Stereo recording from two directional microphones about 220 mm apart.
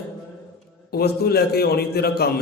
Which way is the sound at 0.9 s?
45° left (ahead or behind).